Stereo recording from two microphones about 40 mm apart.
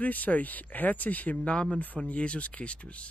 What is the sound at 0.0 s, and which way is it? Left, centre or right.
Speech, left.